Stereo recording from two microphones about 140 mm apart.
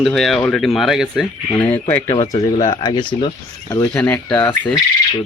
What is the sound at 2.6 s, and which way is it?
Speech, 30° left (ahead or behind).